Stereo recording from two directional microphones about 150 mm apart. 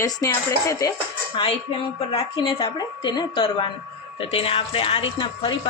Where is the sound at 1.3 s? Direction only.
40° left (ahead or behind).